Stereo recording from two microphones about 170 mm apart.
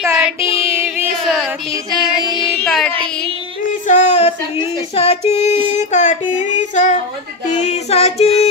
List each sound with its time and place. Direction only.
0.0 s child singing: 15° right (ahead or behind)
1.2 s a sound: centre (ahead or behind)
1.9 s music: 25° right (ahead or behind)
2.6 s child singing: centre (ahead or behind)
3.8 s female singing: 45° left (ahead or behind)
5.3 s child singing: 40° left (ahead or behind)